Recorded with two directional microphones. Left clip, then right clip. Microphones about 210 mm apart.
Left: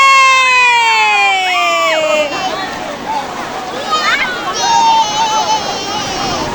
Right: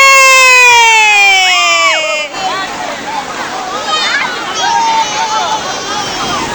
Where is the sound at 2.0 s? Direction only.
15° left (ahead or behind).